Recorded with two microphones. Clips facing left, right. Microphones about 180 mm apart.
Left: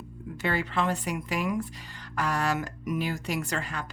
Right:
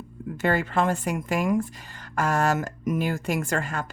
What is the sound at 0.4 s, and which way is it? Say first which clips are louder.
Speech: right 5 dB; 45° right (ahead or behind).